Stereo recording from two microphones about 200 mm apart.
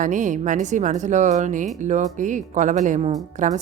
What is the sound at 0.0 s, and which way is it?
Speech, 40° right (ahead or behind).